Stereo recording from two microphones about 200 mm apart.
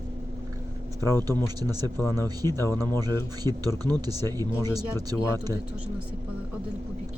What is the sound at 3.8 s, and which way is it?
Speech, 20° right (ahead or behind).